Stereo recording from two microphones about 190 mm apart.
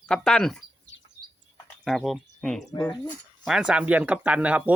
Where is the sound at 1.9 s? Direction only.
Centre (ahead or behind).